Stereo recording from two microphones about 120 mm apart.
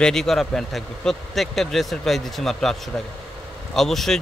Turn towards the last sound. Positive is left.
turn(degrees=0)  # may be behind; listen again after turning